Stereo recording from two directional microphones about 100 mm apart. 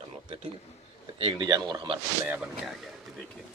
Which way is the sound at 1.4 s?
45° right (ahead or behind).